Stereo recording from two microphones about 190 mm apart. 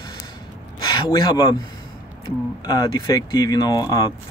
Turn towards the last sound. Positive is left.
turn(degrees=20)  # may be behind; listen again after turning